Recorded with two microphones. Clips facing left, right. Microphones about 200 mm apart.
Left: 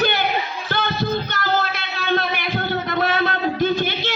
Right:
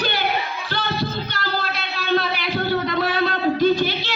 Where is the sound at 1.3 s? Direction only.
50° left (ahead or behind).